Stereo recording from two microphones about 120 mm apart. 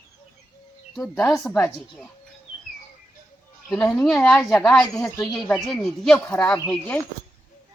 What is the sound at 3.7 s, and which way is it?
Speech, 10° left (ahead or behind).